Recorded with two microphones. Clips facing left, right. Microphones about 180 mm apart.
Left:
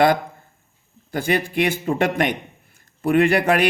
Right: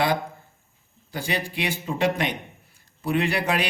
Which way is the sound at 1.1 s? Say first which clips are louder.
Left 8 dB; 55° left (ahead or behind).